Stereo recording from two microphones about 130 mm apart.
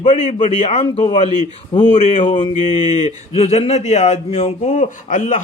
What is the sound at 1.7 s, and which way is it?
Speech, 60° left (ahead or behind).